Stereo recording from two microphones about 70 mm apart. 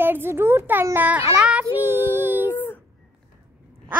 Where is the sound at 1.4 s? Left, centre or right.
Centre.